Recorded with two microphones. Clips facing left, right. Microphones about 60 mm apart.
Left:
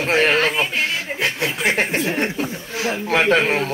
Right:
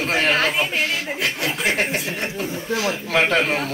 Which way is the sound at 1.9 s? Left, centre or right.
Left.